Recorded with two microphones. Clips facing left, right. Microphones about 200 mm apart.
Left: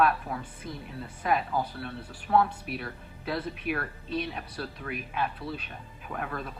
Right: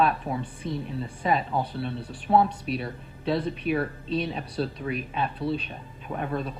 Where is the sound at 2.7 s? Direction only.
Centre (ahead or behind).